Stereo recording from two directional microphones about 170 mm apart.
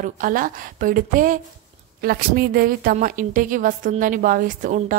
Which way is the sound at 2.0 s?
65° right (ahead or behind).